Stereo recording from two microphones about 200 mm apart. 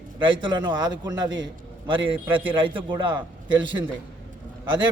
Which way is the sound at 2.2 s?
10° right (ahead or behind).